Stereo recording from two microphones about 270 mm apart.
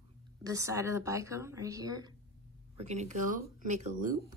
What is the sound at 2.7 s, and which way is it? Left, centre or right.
Speech, right.